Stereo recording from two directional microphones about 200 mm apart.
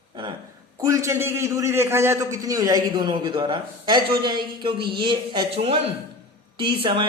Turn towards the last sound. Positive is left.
turn(degrees=-25)  # may be behind; listen again after turning